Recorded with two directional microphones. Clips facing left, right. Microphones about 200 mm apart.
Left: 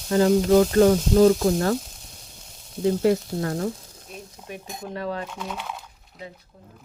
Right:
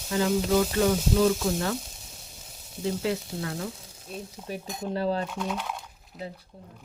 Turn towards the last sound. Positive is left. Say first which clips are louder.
# right 2 dB
turn(degrees=0)  # may be behind; listen again after turning